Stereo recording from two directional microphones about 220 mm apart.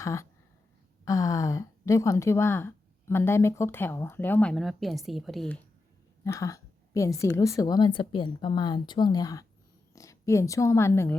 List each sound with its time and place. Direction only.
0.0 s speech: 15° left (ahead or behind)
6.2 s a woman's voice: 15° left (ahead or behind)